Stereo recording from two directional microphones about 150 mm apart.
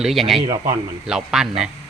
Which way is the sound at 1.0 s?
5° right (ahead or behind).